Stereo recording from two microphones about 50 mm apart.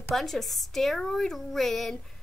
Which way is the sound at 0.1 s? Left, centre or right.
Centre.